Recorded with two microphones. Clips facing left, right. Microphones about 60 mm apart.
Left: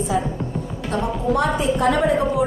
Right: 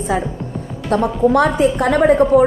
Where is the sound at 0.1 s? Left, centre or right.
Right.